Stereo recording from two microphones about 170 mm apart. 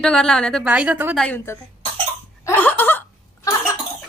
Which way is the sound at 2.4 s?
10° left (ahead or behind).